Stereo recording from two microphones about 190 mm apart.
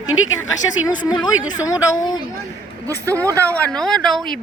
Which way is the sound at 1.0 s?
20° left (ahead or behind).